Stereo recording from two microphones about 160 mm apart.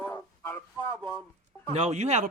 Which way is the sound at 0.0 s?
15° left (ahead or behind).